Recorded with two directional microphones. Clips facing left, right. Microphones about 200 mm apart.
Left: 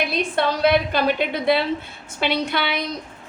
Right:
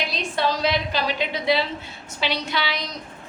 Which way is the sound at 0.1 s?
55° left (ahead or behind).